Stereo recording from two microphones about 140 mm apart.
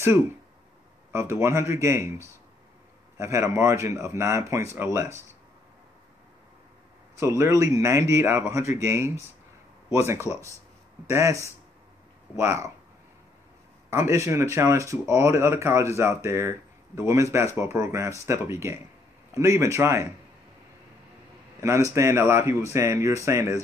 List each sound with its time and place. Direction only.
1.1 s speech: 20° right (ahead or behind)
7.2 s speech: 20° right (ahead or behind)
13.8 s speech: 20° right (ahead or behind)
21.5 s speech: 20° right (ahead or behind)